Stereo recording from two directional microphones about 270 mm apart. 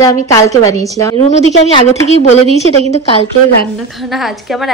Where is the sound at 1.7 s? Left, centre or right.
Left.